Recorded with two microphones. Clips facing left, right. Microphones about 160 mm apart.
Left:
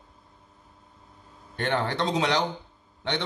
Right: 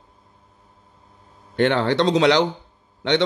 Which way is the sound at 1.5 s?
80° right.